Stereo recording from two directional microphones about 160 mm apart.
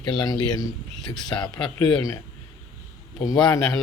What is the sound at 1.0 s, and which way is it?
Speech, 5° left (ahead or behind).